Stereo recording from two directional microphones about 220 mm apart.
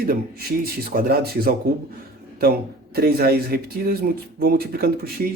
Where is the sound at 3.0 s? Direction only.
45° right (ahead or behind).